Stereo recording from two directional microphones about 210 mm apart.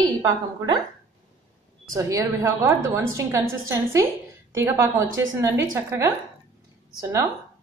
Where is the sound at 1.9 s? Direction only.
15° right (ahead or behind).